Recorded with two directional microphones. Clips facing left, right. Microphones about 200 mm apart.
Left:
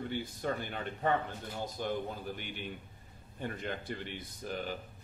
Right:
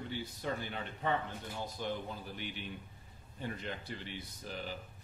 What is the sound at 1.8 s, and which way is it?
Speech, 50° left (ahead or behind).